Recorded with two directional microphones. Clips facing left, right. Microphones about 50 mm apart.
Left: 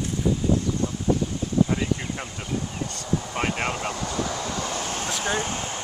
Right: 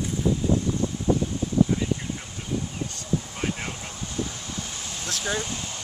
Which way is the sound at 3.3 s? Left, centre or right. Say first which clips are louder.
Left 5 dB; left.